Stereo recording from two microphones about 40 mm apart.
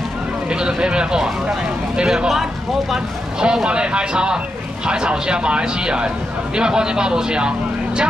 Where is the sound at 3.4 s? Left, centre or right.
Right.